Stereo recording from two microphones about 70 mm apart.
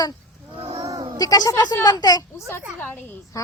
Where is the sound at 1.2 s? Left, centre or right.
Left.